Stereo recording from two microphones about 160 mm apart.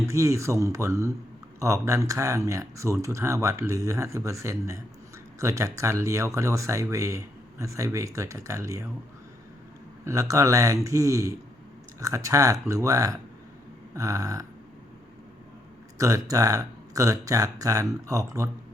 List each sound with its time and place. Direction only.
0.0 s speech: 20° right (ahead or behind)
10.0 s speech: 20° right (ahead or behind)
16.0 s speech: 20° right (ahead or behind)